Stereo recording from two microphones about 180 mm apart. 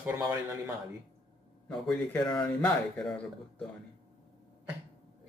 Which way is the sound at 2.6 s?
5° left (ahead or behind).